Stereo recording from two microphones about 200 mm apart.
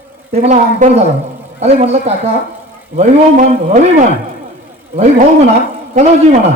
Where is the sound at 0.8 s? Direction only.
40° right (ahead or behind).